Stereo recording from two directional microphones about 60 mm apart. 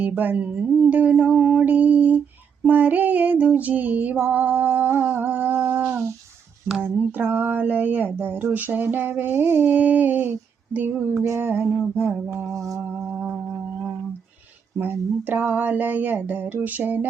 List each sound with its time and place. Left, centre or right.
0.0 s female singing: right
1.5 s lullaby: right
2.6 s female singing: right
6.8 s speech: right
9.6 s female singing: right
10.8 s speech: right
11.9 s female singing: right
12.5 s music: right
14.8 s female singing: right